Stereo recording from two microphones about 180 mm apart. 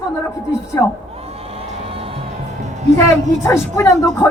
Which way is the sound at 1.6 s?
35° right (ahead or behind).